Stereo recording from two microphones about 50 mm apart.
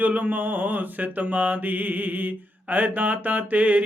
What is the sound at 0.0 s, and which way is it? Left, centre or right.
Mantra, right.